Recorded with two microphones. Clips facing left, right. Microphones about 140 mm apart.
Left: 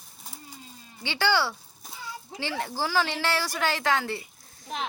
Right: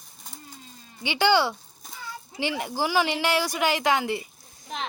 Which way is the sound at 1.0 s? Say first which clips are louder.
Right 4 dB; 15° right (ahead or behind).